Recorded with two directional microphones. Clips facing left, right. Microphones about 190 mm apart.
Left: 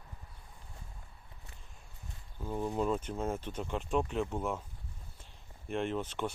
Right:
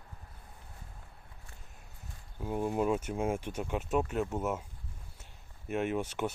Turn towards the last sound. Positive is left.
turn(degrees=-10)  # may be behind; listen again after turning